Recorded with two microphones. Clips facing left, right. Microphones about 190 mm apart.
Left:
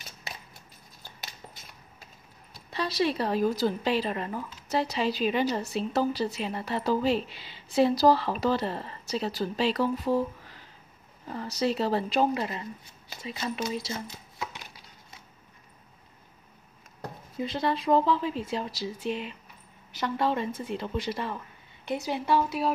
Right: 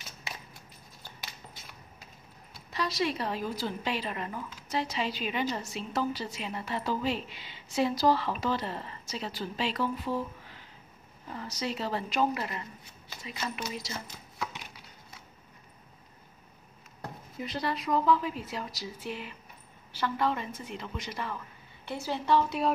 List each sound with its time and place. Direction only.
2.7 s speech: 30° left (ahead or behind)
11.6 s speech: 35° left (ahead or behind)
17.4 s speech: 25° left (ahead or behind)
20.6 s speech: 30° left (ahead or behind)
21.8 s a woman's voice: 15° left (ahead or behind)